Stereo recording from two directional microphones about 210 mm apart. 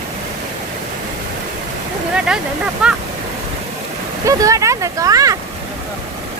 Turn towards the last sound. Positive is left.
turn(degrees=-15)  # may be behind; listen again after turning